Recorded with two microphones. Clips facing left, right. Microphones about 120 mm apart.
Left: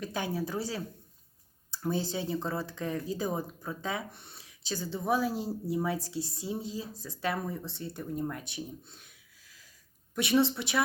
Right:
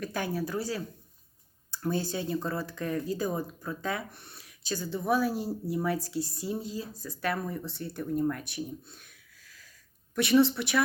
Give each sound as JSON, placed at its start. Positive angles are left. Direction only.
{"t": 0.0, "sound": "speech", "side_deg": 20}
{"t": 2.0, "sound": "speech", "side_deg": 20}